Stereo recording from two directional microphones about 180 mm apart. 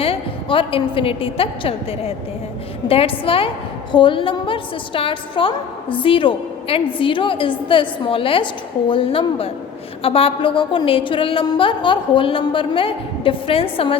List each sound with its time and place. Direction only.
0.0 s a woman's voice: 30° left (ahead or behind)